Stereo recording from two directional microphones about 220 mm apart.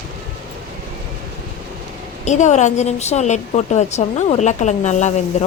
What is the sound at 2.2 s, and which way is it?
Speech, 30° left (ahead or behind).